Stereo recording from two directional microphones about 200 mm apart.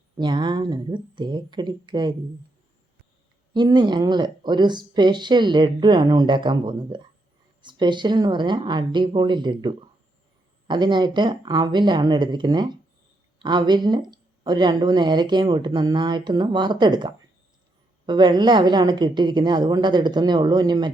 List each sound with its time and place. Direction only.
0.2 s speech: 20° right (ahead or behind)
3.5 s speech: 20° right (ahead or behind)